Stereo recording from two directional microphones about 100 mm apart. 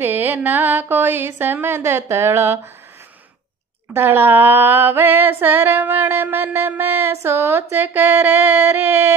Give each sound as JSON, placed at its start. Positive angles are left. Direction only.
{"t": 0.0, "sound": "female singing", "side_deg": -20}
{"t": 3.9, "sound": "female singing", "side_deg": -20}